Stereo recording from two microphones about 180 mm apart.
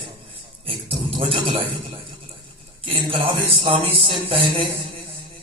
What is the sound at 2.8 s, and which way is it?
A man's voice, 30° right (ahead or behind).